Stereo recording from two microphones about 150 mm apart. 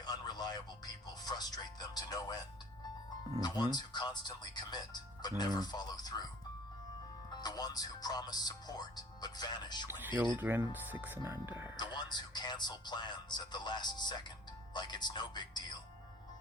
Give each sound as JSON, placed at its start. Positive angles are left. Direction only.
{"t": 0.0, "sound": "speech", "side_deg": 25}
{"t": 3.4, "sound": "speech", "side_deg": 25}
{"t": 7.3, "sound": "speech", "side_deg": 25}
{"t": 9.8, "sound": "speech", "side_deg": -15}
{"t": 11.8, "sound": "speech", "side_deg": 30}